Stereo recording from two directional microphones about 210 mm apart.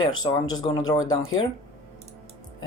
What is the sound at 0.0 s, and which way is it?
Speech, 20° left (ahead or behind).